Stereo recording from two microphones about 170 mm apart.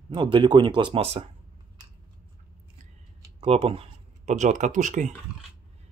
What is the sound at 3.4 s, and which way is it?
Speech, 35° right (ahead or behind).